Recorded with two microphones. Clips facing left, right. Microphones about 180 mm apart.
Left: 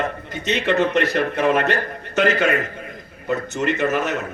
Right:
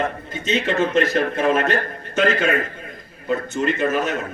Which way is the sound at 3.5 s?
70° left (ahead or behind).